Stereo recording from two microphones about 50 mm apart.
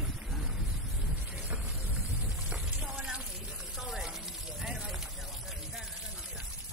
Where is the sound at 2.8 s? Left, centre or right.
Right.